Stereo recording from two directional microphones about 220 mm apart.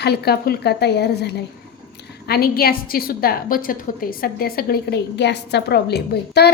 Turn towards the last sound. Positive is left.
turn(degrees=50)  # may be behind; listen again after turning